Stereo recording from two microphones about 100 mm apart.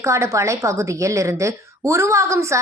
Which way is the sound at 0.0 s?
30° right (ahead or behind).